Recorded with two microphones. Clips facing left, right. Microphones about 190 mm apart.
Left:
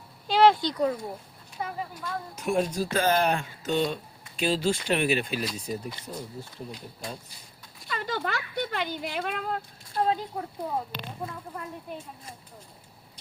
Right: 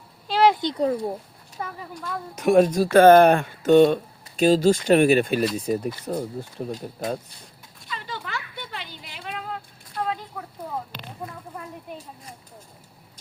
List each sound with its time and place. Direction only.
0.3 s a sound: 5° right (ahead or behind)
0.5 s speech: 20° right (ahead or behind)
0.8 s speech: 35° right (ahead or behind)
2.3 s speech: 80° right; by 5.5 s 50° right (ahead or behind)
6.1 s speech: 70° right (ahead or behind)
6.7 s speech: 45° right (ahead or behind)
7.9 s a sound: 45° left (ahead or behind)
9.9 s speech: 30° left (ahead or behind)